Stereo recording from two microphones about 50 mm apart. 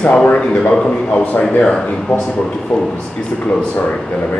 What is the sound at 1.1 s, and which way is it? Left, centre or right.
Speech, left.